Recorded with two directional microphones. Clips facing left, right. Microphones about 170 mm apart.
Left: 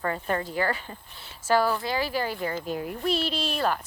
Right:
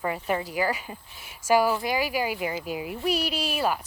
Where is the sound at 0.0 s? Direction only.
10° right (ahead or behind).